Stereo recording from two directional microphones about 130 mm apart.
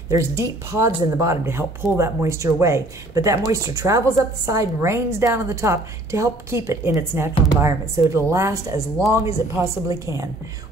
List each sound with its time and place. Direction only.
0.1 s speech: 20° right (ahead or behind)